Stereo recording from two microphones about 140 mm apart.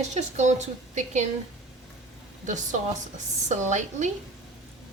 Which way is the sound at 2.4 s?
60° right (ahead or behind).